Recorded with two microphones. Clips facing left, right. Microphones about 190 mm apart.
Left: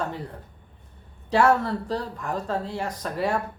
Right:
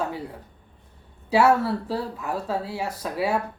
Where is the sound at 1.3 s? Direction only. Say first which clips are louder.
Right 1 dB; 5° right (ahead or behind).